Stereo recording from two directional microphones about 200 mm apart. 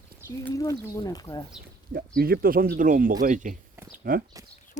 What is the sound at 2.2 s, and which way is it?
Speech, 50° right (ahead or behind).